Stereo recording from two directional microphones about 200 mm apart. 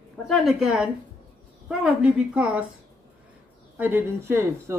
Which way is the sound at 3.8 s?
10° right (ahead or behind).